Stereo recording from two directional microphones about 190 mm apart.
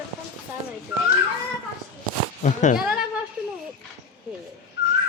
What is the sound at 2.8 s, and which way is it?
Speech, 5° right (ahead or behind).